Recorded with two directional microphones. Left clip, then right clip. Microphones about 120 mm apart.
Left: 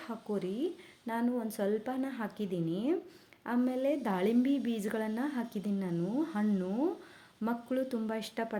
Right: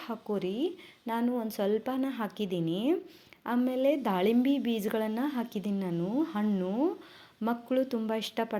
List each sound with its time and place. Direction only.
0.0 s a woman's voice: 15° right (ahead or behind)